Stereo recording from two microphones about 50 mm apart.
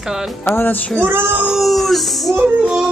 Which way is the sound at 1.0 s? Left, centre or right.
Right.